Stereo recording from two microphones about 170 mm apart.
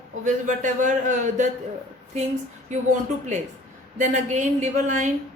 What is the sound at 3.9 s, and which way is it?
Speech, 45° right (ahead or behind).